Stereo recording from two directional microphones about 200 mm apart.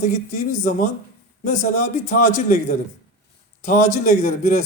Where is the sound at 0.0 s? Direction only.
40° left (ahead or behind).